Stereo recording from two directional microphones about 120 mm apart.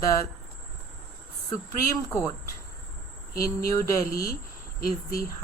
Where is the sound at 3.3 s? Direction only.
25° left (ahead or behind).